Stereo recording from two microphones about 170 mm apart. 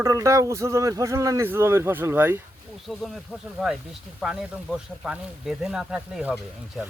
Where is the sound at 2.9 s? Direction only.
Centre (ahead or behind).